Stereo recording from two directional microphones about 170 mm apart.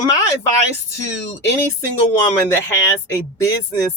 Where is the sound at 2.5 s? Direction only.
15° left (ahead or behind).